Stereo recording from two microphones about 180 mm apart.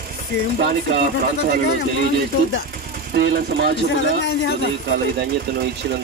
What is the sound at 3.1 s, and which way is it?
Speech, 65° right (ahead or behind).